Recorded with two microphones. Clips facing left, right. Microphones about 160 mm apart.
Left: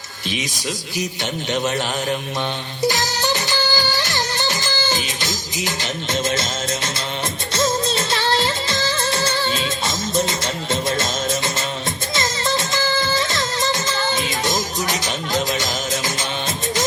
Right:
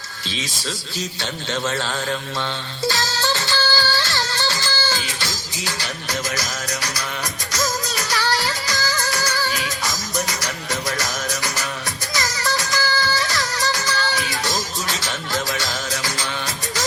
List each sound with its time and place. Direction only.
0.3 s a man's voice: 20° left (ahead or behind)
2.8 s music: 20° left (ahead or behind)
7.5 s music of bollywood: 25° left (ahead or behind)
12.1 s music: 25° left (ahead or behind)